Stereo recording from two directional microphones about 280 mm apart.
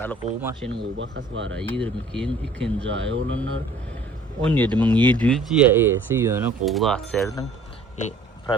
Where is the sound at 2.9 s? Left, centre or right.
Right.